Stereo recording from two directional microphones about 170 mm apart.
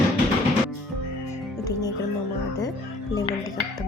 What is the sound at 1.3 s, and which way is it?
Music, 20° left (ahead or behind).